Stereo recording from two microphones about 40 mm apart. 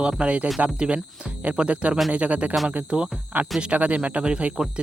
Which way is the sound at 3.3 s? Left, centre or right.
Right.